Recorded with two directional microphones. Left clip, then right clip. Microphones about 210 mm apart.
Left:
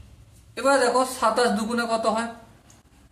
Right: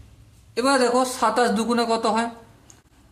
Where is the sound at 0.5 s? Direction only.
45° right (ahead or behind).